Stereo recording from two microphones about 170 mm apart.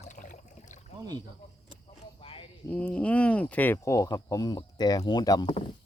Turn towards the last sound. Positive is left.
turn(degrees=25)  # may be behind; listen again after turning